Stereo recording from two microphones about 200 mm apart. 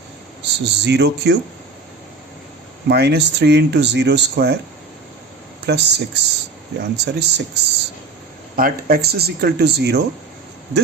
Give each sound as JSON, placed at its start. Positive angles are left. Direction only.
{"t": 0.4, "sound": "speech", "side_deg": -60}
{"t": 2.9, "sound": "speech", "side_deg": -55}
{"t": 5.6, "sound": "speech", "side_deg": -55}
{"t": 8.5, "sound": "speech", "side_deg": -45}